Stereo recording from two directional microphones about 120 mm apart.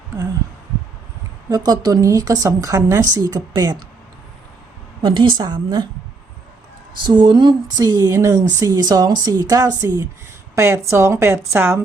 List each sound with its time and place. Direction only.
1.5 s a woman's voice: 30° right (ahead or behind)
5.0 s a woman's voice: 45° right (ahead or behind)
7.0 s a woman's voice: 40° right (ahead or behind); by 11.8 s 20° right (ahead or behind)